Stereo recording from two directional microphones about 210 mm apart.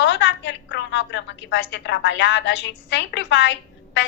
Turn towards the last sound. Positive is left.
turn(degrees=60)  # may be behind; listen again after turning